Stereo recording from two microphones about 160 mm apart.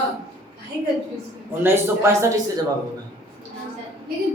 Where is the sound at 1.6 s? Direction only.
15° right (ahead or behind).